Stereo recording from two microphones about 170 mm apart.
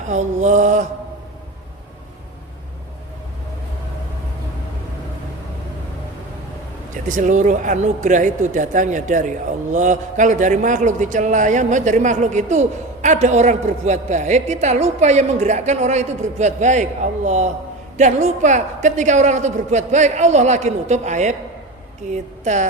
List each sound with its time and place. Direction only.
0.1 s a man's voice: 45° right (ahead or behind)
6.9 s a man's voice: 50° right (ahead or behind)